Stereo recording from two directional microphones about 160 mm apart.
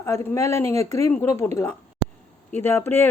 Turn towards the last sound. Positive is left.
turn(degrees=15)  # may be behind; listen again after turning